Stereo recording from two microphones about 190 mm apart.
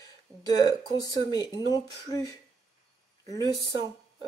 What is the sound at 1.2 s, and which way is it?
Speech, 20° left (ahead or behind).